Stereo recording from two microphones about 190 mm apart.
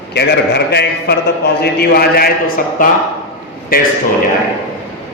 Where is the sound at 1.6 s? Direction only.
55° left (ahead or behind).